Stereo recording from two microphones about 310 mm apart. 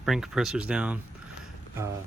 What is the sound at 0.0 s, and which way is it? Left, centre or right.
Speech, centre.